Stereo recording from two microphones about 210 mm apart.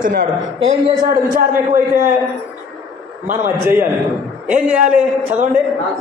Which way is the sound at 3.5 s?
10° right (ahead or behind).